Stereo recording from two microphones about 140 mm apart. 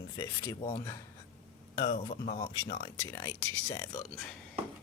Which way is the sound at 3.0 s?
20° left (ahead or behind).